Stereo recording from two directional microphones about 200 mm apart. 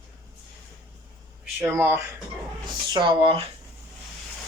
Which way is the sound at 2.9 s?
25° right (ahead or behind).